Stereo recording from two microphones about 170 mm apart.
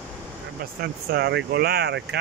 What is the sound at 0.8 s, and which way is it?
Speech, 70° right (ahead or behind).